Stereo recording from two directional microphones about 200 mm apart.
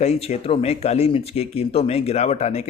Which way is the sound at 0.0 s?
30° left (ahead or behind).